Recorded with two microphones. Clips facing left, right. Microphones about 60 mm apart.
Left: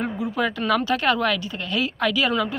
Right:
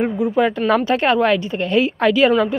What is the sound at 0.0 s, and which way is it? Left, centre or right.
Speech, right.